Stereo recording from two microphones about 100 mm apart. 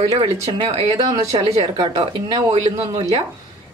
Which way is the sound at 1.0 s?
35° right (ahead or behind).